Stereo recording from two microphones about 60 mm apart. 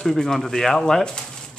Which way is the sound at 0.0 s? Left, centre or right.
Centre.